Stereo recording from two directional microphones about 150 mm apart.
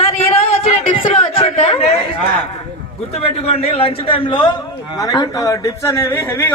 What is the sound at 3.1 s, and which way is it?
A man's voice, 40° left (ahead or behind).